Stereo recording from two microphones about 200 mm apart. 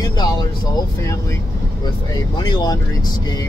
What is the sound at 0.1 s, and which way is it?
Music, 20° left (ahead or behind).